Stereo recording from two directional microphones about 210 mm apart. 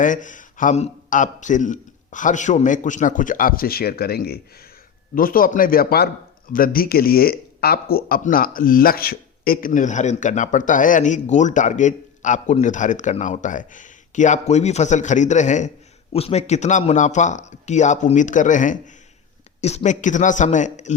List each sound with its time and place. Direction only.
0.0 s speech: 40° left (ahead or behind)